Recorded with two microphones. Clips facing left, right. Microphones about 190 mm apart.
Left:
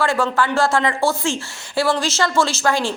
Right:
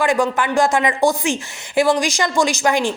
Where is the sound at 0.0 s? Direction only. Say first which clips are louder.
Right 1 dB; 15° right (ahead or behind).